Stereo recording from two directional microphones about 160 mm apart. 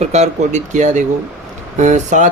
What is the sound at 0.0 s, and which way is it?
Speech, 45° right (ahead or behind).